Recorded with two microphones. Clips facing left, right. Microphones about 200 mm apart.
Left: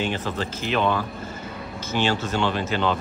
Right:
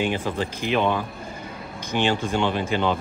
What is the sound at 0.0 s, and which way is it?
Speech, 10° right (ahead or behind).